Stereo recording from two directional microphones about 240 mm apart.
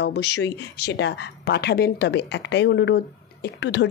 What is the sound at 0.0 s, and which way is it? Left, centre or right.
A woman's voice, left.